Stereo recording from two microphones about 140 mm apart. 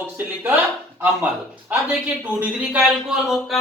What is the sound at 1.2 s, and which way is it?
Speech, 5° right (ahead or behind).